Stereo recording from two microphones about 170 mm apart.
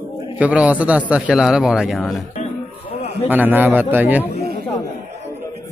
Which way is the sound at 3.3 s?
10° right (ahead or behind).